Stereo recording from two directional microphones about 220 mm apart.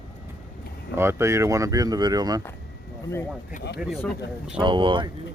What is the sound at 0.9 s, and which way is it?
Speech, 10° right (ahead or behind).